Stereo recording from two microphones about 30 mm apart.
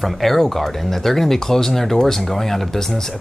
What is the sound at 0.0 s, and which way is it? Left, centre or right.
Speech, centre.